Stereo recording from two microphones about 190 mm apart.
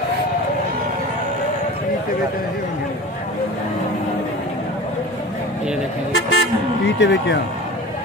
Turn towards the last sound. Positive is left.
turn(degrees=70)  # may be behind; listen again after turning